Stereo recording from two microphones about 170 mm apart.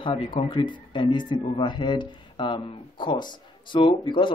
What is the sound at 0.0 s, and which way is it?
Speech, 30° left (ahead or behind).